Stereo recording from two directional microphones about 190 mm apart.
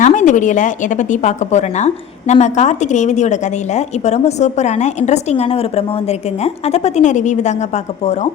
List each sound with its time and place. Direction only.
0.0 s a woman's voice: 40° left (ahead or behind)